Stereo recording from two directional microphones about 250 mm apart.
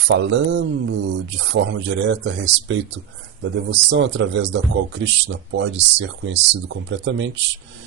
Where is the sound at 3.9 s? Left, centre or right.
Right.